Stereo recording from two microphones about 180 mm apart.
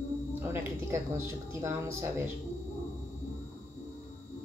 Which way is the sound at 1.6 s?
15° right (ahead or behind).